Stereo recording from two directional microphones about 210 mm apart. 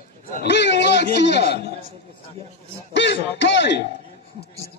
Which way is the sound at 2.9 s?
55° left (ahead or behind).